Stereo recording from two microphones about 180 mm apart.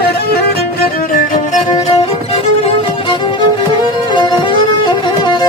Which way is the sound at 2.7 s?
25° left (ahead or behind).